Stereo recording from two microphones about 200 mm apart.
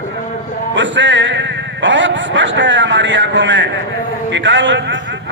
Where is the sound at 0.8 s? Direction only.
65° right (ahead or behind).